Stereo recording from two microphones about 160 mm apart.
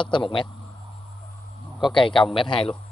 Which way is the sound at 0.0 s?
30° left (ahead or behind).